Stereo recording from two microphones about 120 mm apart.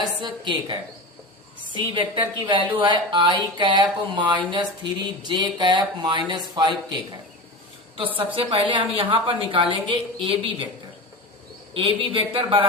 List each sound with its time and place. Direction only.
0.0 s a woman's voice: 35° right (ahead or behind)
11.7 s a woman's voice: 45° right (ahead or behind)